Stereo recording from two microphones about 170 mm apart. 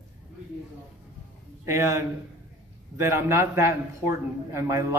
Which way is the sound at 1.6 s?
15° right (ahead or behind).